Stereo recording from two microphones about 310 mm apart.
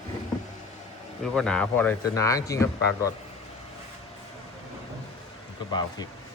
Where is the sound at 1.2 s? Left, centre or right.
Centre.